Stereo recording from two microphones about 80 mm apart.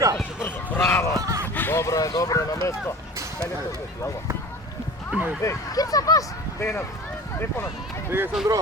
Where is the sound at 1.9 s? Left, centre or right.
Left.